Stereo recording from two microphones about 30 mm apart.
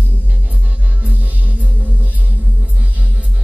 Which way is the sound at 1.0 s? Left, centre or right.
Right.